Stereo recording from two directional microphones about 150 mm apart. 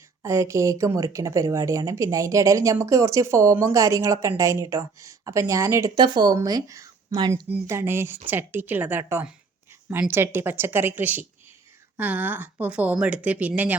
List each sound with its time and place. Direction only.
0.2 s speech: 20° right (ahead or behind)
6.0 s speech: 30° right (ahead or behind); by 13.7 s 10° right (ahead or behind)